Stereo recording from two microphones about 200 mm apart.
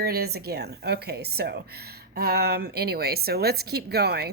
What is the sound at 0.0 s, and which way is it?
Speech, 50° right (ahead or behind).